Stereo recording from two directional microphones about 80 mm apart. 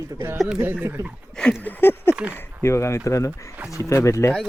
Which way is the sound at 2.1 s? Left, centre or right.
Centre.